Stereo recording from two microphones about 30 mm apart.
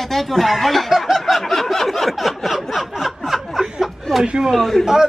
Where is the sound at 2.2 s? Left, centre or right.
Centre.